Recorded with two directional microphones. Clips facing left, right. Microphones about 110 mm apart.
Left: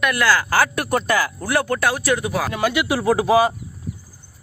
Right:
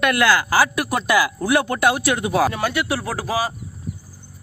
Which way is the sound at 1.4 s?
15° right (ahead or behind).